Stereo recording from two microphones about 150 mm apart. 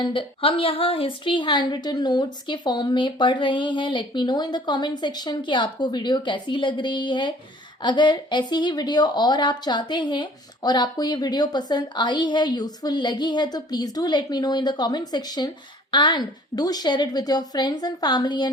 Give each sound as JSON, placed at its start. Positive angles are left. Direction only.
{"t": 0.0, "sound": "a woman's voice", "side_deg": 35}